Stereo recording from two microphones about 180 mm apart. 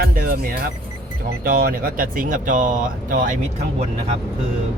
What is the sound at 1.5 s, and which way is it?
Speech, 55° right (ahead or behind).